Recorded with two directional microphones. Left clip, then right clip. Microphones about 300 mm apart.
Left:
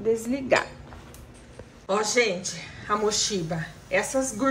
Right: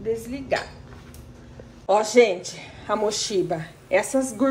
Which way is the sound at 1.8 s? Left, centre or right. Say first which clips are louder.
Right 6 dB; centre.